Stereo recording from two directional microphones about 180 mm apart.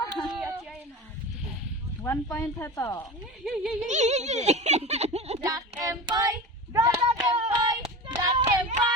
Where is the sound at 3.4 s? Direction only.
Centre (ahead or behind).